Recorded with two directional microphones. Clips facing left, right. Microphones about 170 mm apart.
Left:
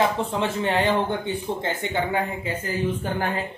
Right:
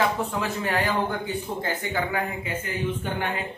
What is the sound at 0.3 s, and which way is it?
Speech, 25° left (ahead or behind).